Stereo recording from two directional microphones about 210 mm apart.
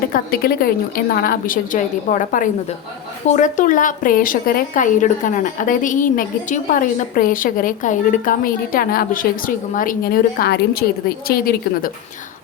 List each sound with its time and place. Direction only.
0.1 s a woman's voice: 45° left (ahead or behind)